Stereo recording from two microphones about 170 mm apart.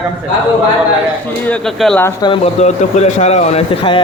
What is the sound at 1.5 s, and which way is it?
Speech, 5° left (ahead or behind).